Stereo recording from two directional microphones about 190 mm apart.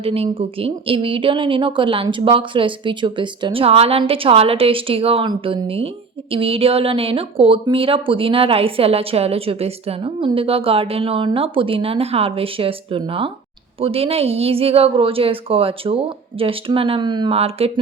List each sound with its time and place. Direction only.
0.0 s speech: 30° right (ahead or behind)